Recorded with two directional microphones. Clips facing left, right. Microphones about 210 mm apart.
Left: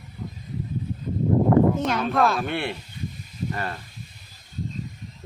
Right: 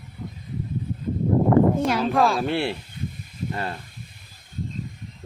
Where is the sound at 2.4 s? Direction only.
30° right (ahead or behind).